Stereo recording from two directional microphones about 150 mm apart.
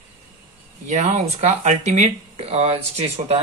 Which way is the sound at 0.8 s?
50° right (ahead or behind).